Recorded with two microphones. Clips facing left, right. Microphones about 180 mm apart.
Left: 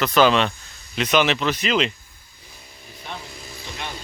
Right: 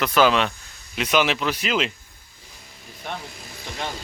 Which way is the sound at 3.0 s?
55° right (ahead or behind).